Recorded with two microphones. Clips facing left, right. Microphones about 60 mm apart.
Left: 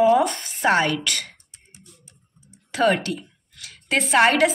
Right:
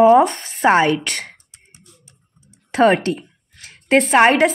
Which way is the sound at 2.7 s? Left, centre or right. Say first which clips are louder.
Right 6 dB; right.